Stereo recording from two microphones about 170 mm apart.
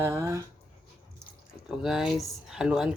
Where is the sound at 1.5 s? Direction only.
5° right (ahead or behind).